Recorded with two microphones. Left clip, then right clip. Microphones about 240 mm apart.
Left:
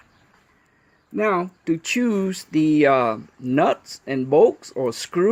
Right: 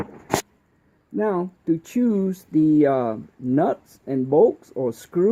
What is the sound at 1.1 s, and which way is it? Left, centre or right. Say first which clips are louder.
Speech: left 2 dB; centre.